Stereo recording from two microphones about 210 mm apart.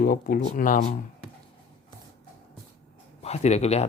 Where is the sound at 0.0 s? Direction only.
45° left (ahead or behind).